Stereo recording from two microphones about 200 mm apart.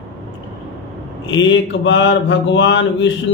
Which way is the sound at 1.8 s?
65° left (ahead or behind).